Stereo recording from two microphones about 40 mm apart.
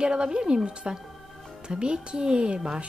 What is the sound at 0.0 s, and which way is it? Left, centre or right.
Speech, right.